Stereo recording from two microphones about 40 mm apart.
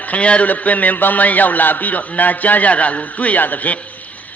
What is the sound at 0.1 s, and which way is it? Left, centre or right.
A man's voice, left.